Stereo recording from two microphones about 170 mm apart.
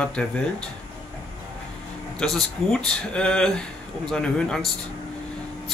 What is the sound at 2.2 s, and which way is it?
Speech, 5° left (ahead or behind).